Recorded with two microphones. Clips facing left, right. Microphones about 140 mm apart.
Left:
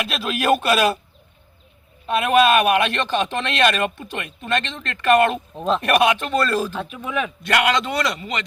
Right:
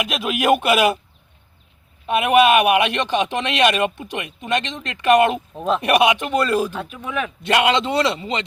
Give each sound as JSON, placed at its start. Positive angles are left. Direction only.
{"t": 0.0, "sound": "speech", "side_deg": -15}
{"t": 2.0, "sound": "speech", "side_deg": -15}
{"t": 7.0, "sound": "speech", "side_deg": 5}
{"t": 7.4, "sound": "a man's voice", "side_deg": -20}